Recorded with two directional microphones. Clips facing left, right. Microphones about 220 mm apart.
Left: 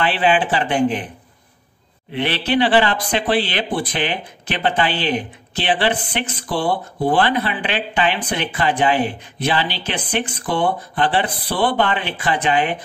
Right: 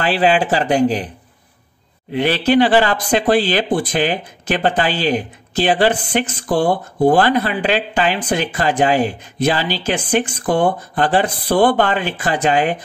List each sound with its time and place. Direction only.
0.0 s speech: 40° right (ahead or behind)
2.1 s speech: 40° right (ahead or behind)